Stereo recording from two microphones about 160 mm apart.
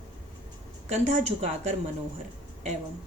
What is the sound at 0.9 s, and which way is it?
Speech, 45° right (ahead or behind).